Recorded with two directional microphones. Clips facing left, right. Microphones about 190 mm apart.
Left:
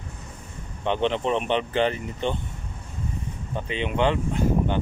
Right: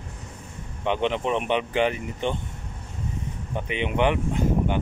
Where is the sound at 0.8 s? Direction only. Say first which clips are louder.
Left 1 dB; 10° right (ahead or behind).